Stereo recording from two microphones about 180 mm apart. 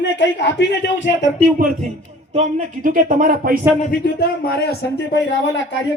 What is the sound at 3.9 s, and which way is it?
A man's voice, 60° left (ahead or behind).